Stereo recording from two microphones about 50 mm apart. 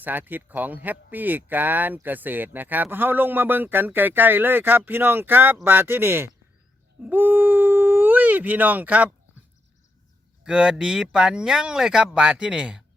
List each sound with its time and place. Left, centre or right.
0.0 s speech: right
7.0 s speech: right
10.4 s speech: centre